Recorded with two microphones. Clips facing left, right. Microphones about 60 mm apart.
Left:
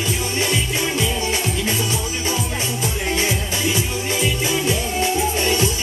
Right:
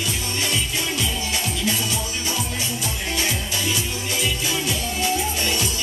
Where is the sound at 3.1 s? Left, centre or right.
Left.